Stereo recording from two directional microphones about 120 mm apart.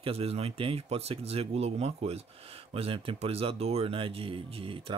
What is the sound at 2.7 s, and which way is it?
Speech, 50° right (ahead or behind).